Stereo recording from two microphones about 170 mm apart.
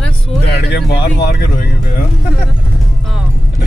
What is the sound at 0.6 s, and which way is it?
Speech, 75° left (ahead or behind).